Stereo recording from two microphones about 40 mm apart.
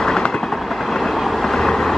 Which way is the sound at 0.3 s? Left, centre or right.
Centre.